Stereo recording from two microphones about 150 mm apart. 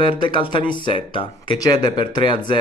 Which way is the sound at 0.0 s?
30° left (ahead or behind).